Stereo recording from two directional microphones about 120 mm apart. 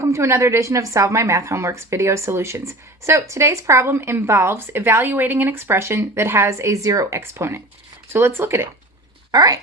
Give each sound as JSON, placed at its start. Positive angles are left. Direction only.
{"t": 0.0, "sound": "a woman's voice", "side_deg": -25}
{"t": 9.3, "sound": "speech", "side_deg": -30}